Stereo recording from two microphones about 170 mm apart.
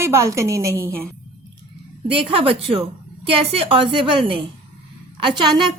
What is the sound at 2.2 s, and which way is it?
A woman's voice, 35° right (ahead or behind).